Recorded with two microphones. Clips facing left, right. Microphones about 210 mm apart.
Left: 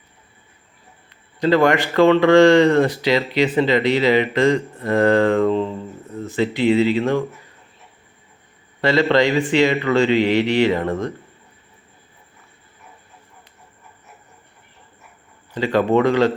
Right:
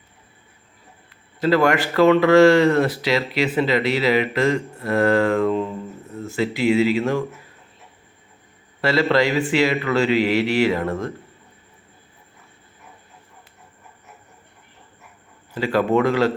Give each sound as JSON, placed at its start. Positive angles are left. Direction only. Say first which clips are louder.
{"t": 1.1, "sound": "speech", "louder": "left 2 dB", "side_deg": -5}
{"t": 5.5, "sound": "speech", "louder": "left 2 dB", "side_deg": 30}
{"t": 6.1, "sound": "speech", "louder": "left 2 dB", "side_deg": 0}
{"t": 8.8, "sound": "speech", "louder": "left 2 dB", "side_deg": -5}
{"t": 15.5, "sound": "speech", "louder": "left 2 dB", "side_deg": -5}